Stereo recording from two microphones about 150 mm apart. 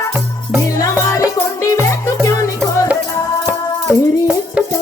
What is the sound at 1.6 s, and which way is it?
Music, 20° left (ahead or behind).